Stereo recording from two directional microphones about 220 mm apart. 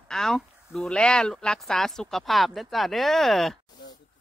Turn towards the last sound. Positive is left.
turn(degrees=0)  # may be behind; listen again after turning